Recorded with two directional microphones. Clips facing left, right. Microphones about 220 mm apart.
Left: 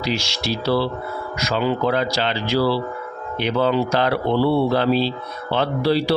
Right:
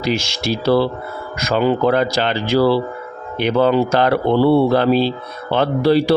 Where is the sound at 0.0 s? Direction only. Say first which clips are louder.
Right 4 dB; 50° right (ahead or behind).